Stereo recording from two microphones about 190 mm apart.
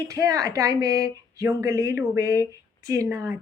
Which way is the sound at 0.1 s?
15° right (ahead or behind).